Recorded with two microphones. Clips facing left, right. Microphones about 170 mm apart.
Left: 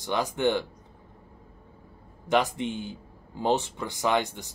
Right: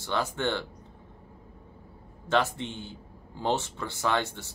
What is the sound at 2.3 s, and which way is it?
Speech, 15° left (ahead or behind).